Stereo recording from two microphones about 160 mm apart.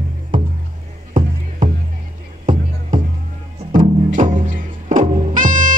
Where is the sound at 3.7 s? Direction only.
55° right (ahead or behind).